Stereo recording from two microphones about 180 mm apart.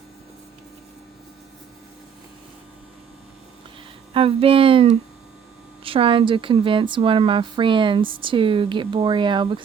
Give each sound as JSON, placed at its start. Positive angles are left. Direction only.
{"t": 4.1, "sound": "a woman's voice", "side_deg": -30}